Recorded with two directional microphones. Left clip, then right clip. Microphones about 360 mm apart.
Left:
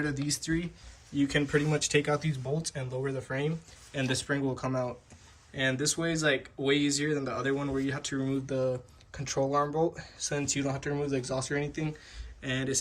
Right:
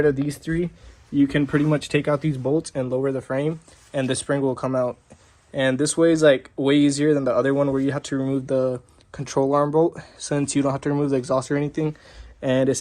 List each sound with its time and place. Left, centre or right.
1.1 s speech: centre